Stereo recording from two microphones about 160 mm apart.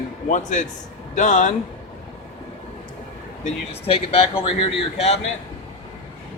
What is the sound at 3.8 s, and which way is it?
Speech, 40° left (ahead or behind).